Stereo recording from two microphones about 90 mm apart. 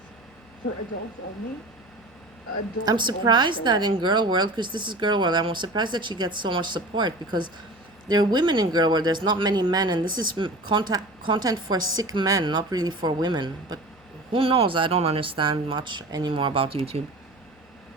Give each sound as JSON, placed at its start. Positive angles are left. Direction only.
{"t": 2.8, "sound": "speech", "side_deg": -55}
{"t": 14.3, "sound": "speech", "side_deg": -90}